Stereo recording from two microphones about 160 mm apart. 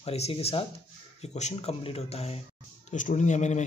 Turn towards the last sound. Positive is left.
turn(degrees=45)  # may be behind; listen again after turning